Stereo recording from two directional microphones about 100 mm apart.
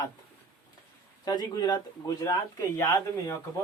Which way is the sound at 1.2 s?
40° left (ahead or behind).